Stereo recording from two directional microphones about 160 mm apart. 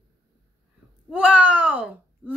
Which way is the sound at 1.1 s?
5° right (ahead or behind).